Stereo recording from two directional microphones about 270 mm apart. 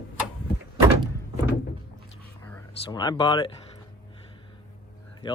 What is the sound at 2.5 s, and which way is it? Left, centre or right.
Speech, centre.